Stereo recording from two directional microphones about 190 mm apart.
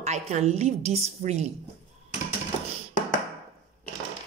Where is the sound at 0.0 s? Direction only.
35° right (ahead or behind).